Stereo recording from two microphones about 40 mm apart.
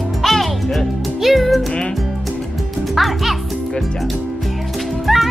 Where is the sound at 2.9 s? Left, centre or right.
Centre.